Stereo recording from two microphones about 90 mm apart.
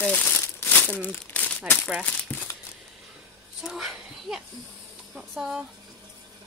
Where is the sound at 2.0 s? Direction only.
20° left (ahead or behind).